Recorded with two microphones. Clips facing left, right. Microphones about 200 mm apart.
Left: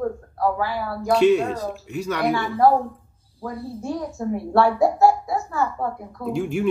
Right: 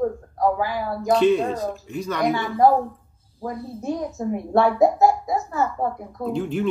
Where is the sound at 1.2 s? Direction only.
10° left (ahead or behind).